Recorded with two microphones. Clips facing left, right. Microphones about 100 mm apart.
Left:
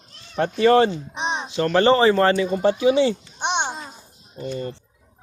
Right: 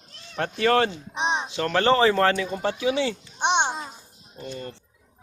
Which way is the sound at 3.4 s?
20° right (ahead or behind).